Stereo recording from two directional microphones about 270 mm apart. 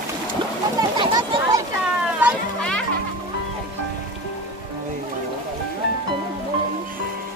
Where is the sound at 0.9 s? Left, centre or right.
Centre.